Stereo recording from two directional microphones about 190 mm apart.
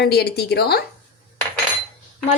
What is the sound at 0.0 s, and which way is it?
Speech, 60° left (ahead or behind).